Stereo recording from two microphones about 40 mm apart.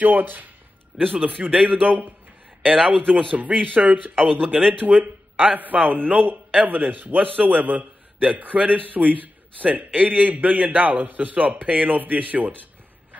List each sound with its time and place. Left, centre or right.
0.0 s a man's voice: right
1.1 s a man's voice: right
2.6 s speech: centre
3.2 s a man's voice: right
4.4 s speech: centre
4.7 s a man's voice: right